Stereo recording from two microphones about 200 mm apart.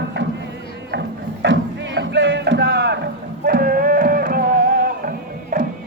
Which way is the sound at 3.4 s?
50° right (ahead or behind).